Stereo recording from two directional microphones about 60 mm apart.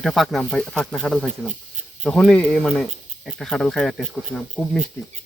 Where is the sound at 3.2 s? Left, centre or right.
Centre.